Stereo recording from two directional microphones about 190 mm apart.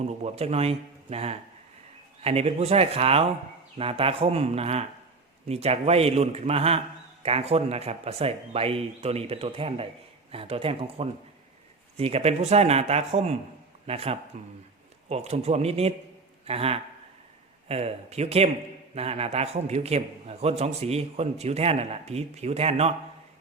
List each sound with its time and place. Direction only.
0.0 s a man's voice: 35° right (ahead or behind)